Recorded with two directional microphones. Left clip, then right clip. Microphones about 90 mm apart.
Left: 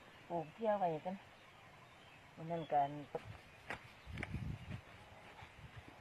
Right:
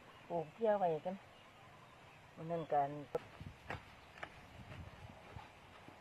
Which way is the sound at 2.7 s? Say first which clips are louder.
Left 1 dB; 60° left (ahead or behind).